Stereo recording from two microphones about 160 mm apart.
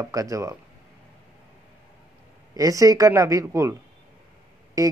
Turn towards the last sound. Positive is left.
turn(degrees=-20)  # may be behind; listen again after turning